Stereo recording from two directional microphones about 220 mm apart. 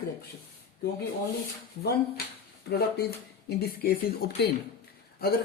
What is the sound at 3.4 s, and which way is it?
Speech, 45° left (ahead or behind).